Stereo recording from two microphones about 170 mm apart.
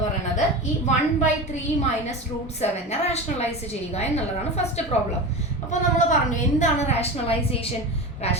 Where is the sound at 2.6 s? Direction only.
40° left (ahead or behind).